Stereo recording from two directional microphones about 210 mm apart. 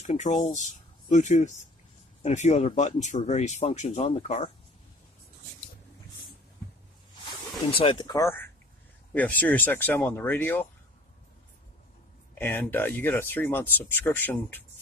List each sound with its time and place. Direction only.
0.1 s speech: 35° left (ahead or behind)
7.6 s speech: 25° left (ahead or behind); by 10.7 s 10° left (ahead or behind)
12.4 s speech: 10° left (ahead or behind)